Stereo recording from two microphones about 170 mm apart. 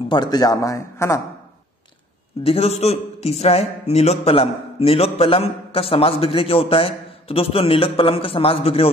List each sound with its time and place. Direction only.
0.1 s speech: 25° left (ahead or behind)
2.4 s a man's voice: 35° left (ahead or behind)